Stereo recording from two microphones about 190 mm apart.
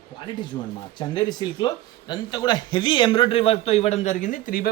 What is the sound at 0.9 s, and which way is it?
Speech, 20° left (ahead or behind).